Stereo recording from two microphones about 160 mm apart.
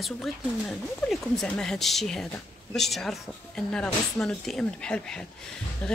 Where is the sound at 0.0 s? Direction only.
Centre (ahead or behind).